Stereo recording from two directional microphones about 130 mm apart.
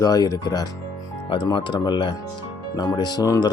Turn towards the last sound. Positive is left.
turn(degrees=30)  # may be behind; listen again after turning